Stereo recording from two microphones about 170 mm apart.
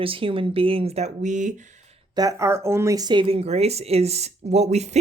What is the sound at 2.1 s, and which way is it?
Speech, 20° right (ahead or behind).